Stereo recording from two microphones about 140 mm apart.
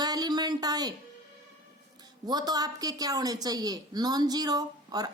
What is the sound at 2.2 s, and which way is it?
A woman's voice, 30° right (ahead or behind).